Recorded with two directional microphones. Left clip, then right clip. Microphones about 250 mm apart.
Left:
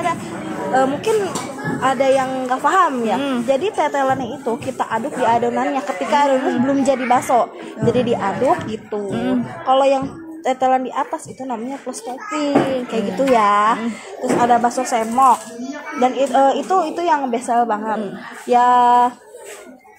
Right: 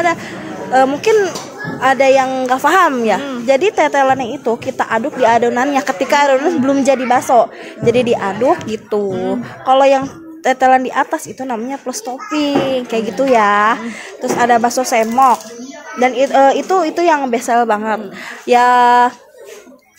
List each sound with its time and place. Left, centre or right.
0.7 s a woman's voice: right